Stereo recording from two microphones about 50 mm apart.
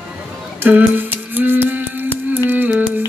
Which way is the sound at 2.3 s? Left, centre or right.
Right.